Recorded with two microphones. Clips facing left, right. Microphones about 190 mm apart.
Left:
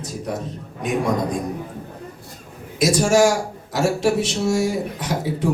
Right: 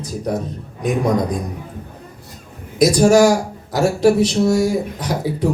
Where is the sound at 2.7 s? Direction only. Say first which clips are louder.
Right 5 dB; 40° right (ahead or behind).